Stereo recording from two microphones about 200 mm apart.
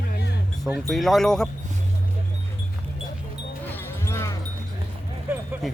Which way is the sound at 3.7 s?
10° left (ahead or behind).